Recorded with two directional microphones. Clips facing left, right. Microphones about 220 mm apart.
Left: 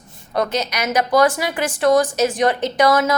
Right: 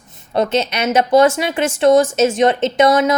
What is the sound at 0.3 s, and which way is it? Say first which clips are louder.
Speech: right 4 dB; 25° right (ahead or behind).